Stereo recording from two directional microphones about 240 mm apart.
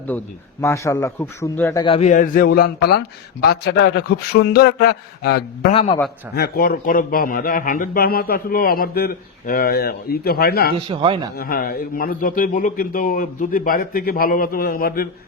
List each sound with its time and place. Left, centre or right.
0.1 s a man's voice: centre; by 3.0 s left
3.4 s a sound: left
5.7 s a man's voice: left
6.3 s a man's voice: left
10.8 s a man's voice: right
11.3 s a man's voice: left